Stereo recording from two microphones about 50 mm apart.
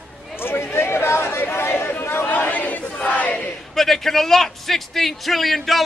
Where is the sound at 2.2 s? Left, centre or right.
Left.